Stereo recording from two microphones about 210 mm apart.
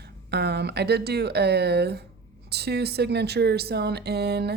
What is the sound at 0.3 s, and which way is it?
Speech, 50° right (ahead or behind).